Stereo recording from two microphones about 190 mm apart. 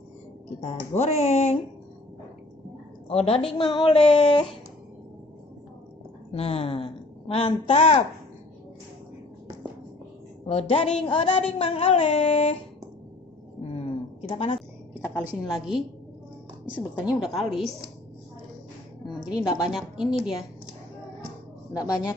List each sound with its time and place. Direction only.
0.6 s speech: 35° left (ahead or behind)
3.1 s child singing: 30° left (ahead or behind)
6.3 s a woman's voice: 30° left (ahead or behind)
10.5 s speech: 30° left (ahead or behind)
11.1 s child singing: 30° left (ahead or behind)
13.7 s a sound: 30° left (ahead or behind)
15.0 s a woman's voice: 10° right (ahead or behind)
19.2 s a woman's voice: 5° right (ahead or behind)
21.7 s child singing: 20° left (ahead or behind)